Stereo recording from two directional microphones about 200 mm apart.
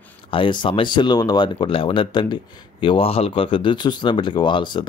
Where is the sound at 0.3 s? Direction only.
25° left (ahead or behind).